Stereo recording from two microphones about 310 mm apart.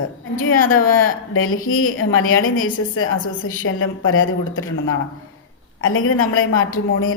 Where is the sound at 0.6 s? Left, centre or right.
Left.